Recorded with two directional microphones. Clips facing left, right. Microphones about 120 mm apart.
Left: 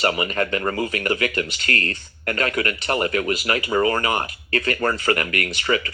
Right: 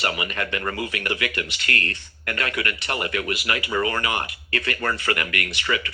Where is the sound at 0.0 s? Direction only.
35° left (ahead or behind).